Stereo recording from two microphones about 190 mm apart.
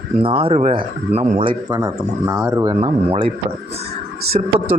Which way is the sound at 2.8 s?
30° right (ahead or behind).